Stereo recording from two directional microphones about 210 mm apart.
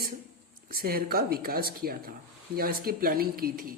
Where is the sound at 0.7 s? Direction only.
45° right (ahead or behind).